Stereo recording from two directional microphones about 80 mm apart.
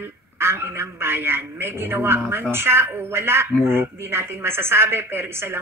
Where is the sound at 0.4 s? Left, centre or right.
Right.